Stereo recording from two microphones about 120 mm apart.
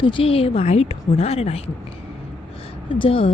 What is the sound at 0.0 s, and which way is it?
A woman's voice, 45° left (ahead or behind).